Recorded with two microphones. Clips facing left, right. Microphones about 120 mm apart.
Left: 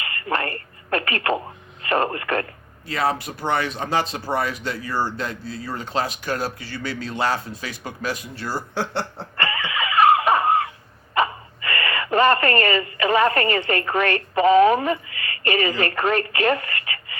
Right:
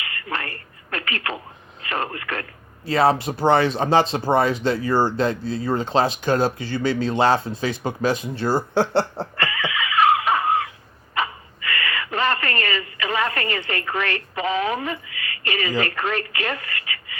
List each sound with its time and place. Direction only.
0.0 s telephone: 45° left (ahead or behind)
1.8 s speech: 45° left (ahead or behind)
2.8 s speech: 30° right (ahead or behind)
9.5 s cough: 40° left (ahead or behind)
11.1 s a sound: 45° left (ahead or behind)